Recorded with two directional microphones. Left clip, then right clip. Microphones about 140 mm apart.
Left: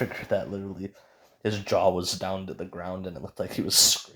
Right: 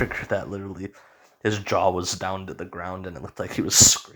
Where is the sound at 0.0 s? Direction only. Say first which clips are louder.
Right 2 dB; 20° right (ahead or behind).